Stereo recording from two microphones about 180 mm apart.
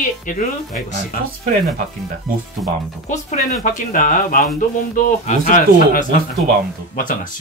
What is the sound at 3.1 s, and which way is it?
Speech, 40° left (ahead or behind).